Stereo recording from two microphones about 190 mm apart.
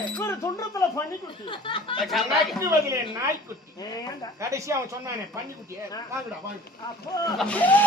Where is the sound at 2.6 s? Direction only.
15° right (ahead or behind).